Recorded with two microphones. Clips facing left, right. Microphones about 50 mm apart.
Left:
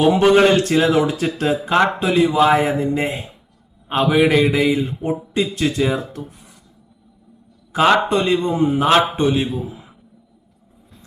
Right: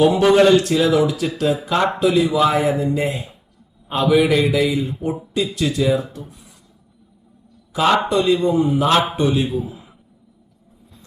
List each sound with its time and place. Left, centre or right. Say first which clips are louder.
0.0 s a man's voice: even; left
0.4 s speech: even; left
7.7 s speech: left 2 dB; left